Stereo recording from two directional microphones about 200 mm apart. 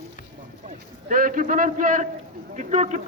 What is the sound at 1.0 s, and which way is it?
A man's voice, 45° right (ahead or behind).